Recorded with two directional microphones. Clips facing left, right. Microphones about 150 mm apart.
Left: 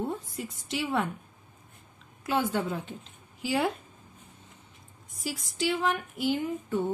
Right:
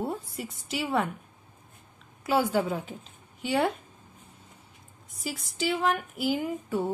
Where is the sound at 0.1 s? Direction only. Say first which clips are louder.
Even; centre (ahead or behind).